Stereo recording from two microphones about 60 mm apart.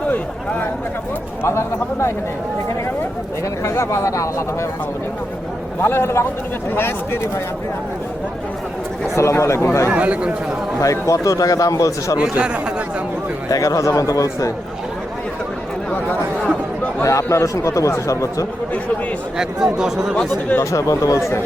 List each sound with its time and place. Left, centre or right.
1.5 s speech: left
3.6 s a man's voice: left
5.8 s speech: left
9.1 s speech: left
9.9 s speech: right
10.8 s a man's voice: left
13.5 s a man's voice: left
17.0 s a man's voice: left
19.4 s speech: centre
20.6 s a man's voice: left